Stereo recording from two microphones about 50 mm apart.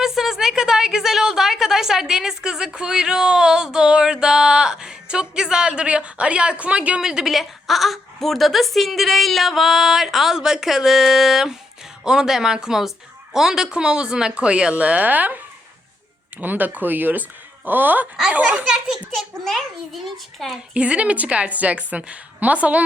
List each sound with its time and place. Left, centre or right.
0.0 s a woman's voice: centre; by 7.0 s right
7.0 s speech: centre
7.3 s a woman's voice: centre; by 15.4 s right
16.4 s speech: right
18.3 s a woman's voice: right
19.1 s a woman's voice: centre
20.7 s a woman's voice: right